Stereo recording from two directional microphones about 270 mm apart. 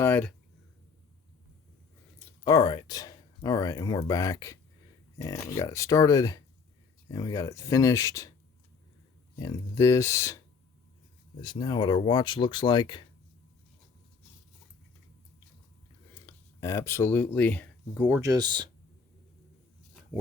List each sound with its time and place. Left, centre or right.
0.0 s speech: centre
2.1 s speech: centre
9.3 s speech: centre
16.2 s speech: centre
18.0 s speech: centre